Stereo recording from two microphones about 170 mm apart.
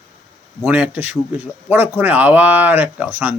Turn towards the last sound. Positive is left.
turn(degrees=-10)  # may be behind; listen again after turning